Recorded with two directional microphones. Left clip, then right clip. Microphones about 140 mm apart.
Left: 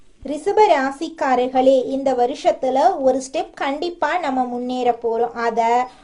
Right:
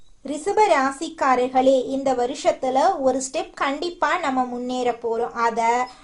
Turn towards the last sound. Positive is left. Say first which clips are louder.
# left 2 dB
turn(degrees=20)  # may be behind; listen again after turning